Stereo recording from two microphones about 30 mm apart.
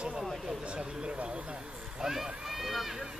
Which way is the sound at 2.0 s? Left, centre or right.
Centre.